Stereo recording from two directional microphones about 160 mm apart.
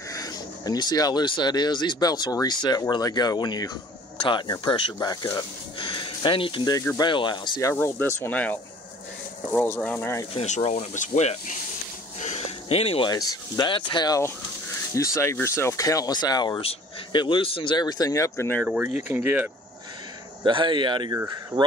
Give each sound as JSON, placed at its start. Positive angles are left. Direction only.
{"t": 0.1, "sound": "speech", "side_deg": 25}
{"t": 7.7, "sound": "speech", "side_deg": 15}
{"t": 10.3, "sound": "speech", "side_deg": 45}
{"t": 12.2, "sound": "a sound", "side_deg": 40}
{"t": 13.1, "sound": "speech", "side_deg": 30}
{"t": 18.6, "sound": "speech", "side_deg": -5}
{"t": 20.4, "sound": "speech", "side_deg": -30}